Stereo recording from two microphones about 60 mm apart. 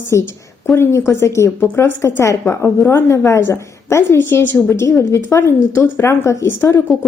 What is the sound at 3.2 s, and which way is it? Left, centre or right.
A woman's voice, left.